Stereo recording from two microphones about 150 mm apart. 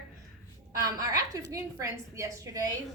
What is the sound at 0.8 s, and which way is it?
A woman's voice, 25° right (ahead or behind).